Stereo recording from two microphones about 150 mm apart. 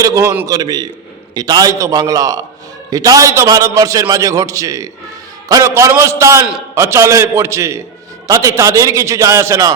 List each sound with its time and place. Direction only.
0.0 s a man's voice: 20° right (ahead or behind)